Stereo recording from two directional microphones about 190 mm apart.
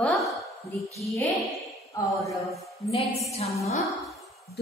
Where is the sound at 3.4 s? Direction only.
35° left (ahead or behind).